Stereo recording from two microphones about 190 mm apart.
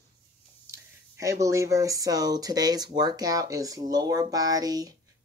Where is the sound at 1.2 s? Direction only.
15° right (ahead or behind).